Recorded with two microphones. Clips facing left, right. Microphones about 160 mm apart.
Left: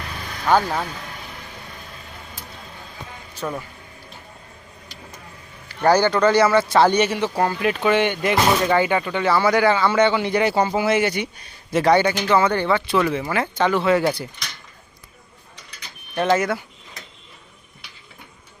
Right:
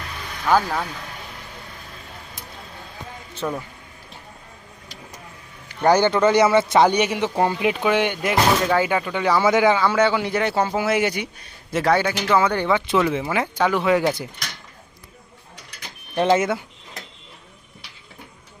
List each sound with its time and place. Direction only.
0.5 s speech: 15° left (ahead or behind)
3.4 s speech: 5° right (ahead or behind)
5.6 s speech: 20° right (ahead or behind); by 9.2 s 5° right (ahead or behind)
9.2 s speech: 15° right (ahead or behind)
16.1 s speech: 25° right (ahead or behind)